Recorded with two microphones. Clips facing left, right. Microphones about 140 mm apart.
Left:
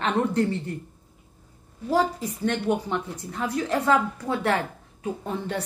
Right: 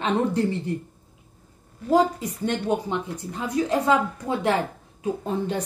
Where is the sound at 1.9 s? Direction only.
15° right (ahead or behind).